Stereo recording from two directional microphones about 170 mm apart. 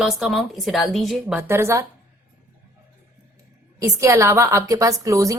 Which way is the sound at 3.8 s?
15° right (ahead or behind).